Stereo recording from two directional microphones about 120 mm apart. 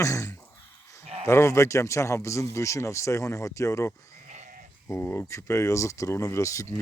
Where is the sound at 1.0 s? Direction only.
60° right (ahead or behind).